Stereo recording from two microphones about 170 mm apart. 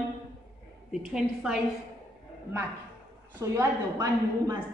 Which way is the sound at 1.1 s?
5° right (ahead or behind).